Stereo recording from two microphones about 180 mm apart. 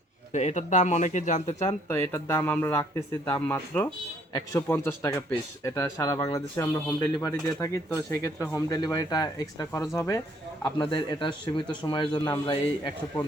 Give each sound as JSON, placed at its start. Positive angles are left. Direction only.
{"t": 0.3, "sound": "speech", "side_deg": 40}
{"t": 1.9, "sound": "speech", "side_deg": 10}